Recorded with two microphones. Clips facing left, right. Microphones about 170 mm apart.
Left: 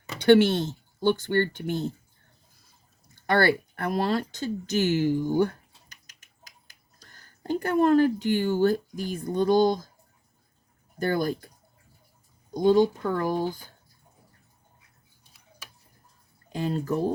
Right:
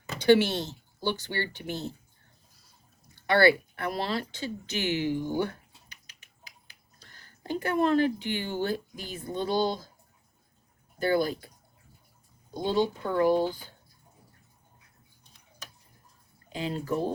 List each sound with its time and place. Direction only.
0.2 s speech: 55° left (ahead or behind)
3.2 s speech: 45° left (ahead or behind)
5.9 s finger snapping: 45° left (ahead or behind)
7.8 s speech: 45° left (ahead or behind)
11.0 s speech: 45° left (ahead or behind)
12.5 s speech: 45° left (ahead or behind)
15.2 s a sound: 10° left (ahead or behind)
16.5 s speech: 45° left (ahead or behind)